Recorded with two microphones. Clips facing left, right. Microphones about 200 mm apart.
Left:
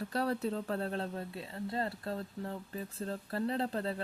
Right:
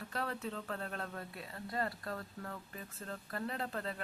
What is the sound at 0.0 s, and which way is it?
Speech, 35° left (ahead or behind).